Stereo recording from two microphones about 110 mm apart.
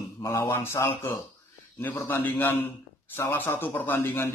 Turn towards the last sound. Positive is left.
turn(degrees=20)  # may be behind; listen again after turning